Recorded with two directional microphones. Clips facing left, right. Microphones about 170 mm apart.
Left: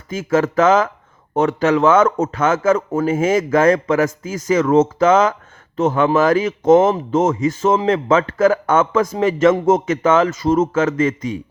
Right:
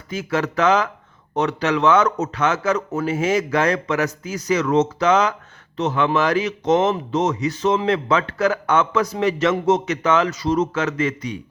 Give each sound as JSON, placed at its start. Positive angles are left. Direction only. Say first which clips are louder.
{"t": 0.1, "sound": "speech", "louder": "left 6 dB", "side_deg": 45}